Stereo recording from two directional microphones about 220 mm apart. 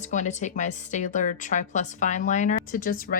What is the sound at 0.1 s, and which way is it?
A woman's voice, 35° left (ahead or behind).